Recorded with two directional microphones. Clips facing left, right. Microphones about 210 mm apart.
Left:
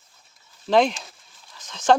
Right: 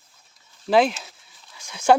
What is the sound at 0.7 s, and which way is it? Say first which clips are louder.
Speech: even; 5° right (ahead or behind).